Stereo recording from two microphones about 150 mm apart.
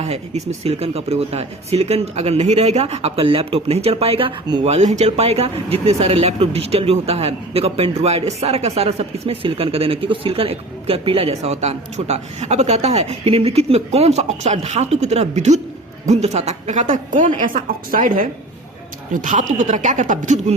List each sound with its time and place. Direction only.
0.0 s speech: 45° right (ahead or behind)
4.6 s speech: 50° right (ahead or behind)